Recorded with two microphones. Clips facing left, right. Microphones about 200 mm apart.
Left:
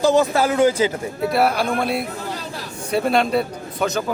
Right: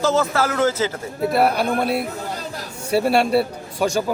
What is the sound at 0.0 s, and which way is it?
Speech, 15° left (ahead or behind).